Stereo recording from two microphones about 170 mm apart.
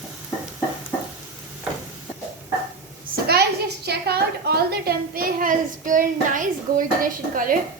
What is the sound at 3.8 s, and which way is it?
A woman's voice, 70° right (ahead or behind).